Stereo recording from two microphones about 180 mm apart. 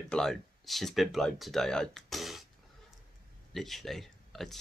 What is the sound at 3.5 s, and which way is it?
Speech, centre (ahead or behind).